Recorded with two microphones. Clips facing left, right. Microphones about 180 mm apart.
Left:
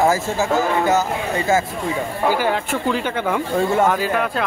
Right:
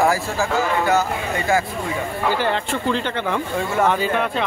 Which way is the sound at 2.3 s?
10° left (ahead or behind).